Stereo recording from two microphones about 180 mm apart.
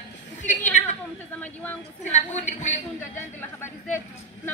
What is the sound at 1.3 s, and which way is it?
Speech, 10° left (ahead or behind).